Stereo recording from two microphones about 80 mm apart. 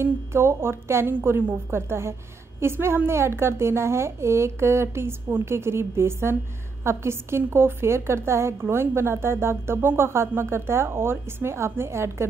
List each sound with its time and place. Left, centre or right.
0.0 s a woman's voice: right